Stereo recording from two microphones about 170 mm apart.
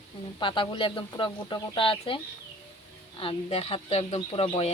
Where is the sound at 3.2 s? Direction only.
35° left (ahead or behind).